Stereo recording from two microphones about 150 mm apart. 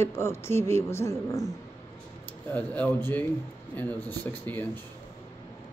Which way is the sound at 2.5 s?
10° left (ahead or behind).